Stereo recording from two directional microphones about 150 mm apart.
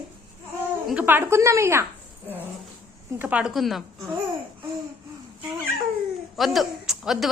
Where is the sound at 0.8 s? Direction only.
10° right (ahead or behind).